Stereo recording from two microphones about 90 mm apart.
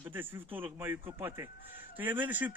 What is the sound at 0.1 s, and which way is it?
Speech, 25° right (ahead or behind).